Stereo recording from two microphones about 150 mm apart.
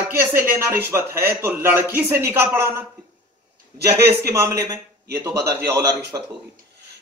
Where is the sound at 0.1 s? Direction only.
15° right (ahead or behind).